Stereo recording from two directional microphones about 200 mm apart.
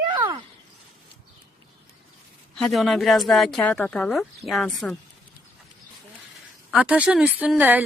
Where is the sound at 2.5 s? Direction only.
Centre (ahead or behind).